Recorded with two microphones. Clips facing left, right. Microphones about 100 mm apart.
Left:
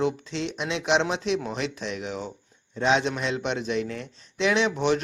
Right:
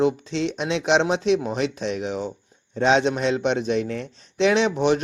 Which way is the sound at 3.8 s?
60° right (ahead or behind).